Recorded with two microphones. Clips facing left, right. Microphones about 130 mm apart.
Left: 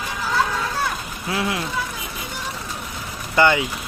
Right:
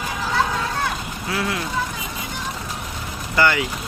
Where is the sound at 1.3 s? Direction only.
25° left (ahead or behind).